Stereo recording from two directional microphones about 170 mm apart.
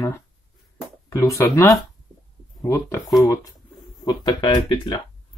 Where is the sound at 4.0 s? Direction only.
25° left (ahead or behind).